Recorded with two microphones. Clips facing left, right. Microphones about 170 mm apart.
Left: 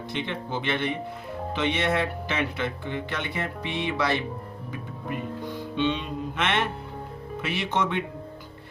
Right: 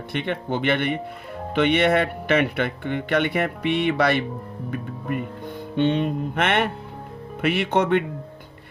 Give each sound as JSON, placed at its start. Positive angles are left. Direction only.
{"t": 0.1, "sound": "speech", "side_deg": -60}
{"t": 5.1, "sound": "music", "side_deg": -55}
{"t": 7.4, "sound": "speech", "side_deg": -60}